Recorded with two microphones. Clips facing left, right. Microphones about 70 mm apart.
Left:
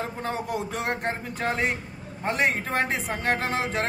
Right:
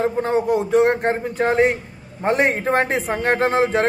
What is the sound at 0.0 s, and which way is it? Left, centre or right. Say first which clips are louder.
A man's voice: right 11 dB; right.